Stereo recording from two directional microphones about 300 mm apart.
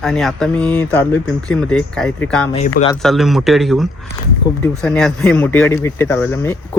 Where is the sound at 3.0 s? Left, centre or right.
Centre.